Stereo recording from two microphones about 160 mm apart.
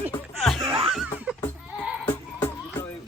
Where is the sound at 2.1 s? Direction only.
10° left (ahead or behind).